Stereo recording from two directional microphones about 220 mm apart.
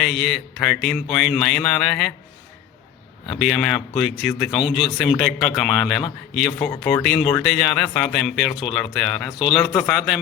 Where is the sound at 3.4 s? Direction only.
Centre (ahead or behind).